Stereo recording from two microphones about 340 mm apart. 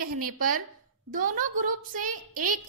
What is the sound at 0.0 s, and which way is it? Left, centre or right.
A woman's voice, right.